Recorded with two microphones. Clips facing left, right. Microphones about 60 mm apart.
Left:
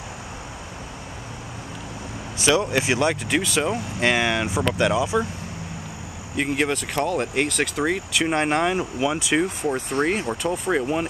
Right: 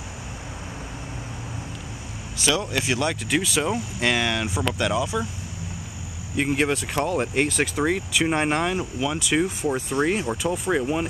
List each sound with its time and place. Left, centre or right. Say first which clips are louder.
2.4 s speech: left 4 dB; left
3.3 s speech: left 1 dB; centre
4.0 s speech: left 3 dB; centre
6.3 s speech: even; centre
8.6 s speech: left 3 dB; centre
9.2 s speech: left 1 dB; centre
10.7 s speech: left 1 dB; centre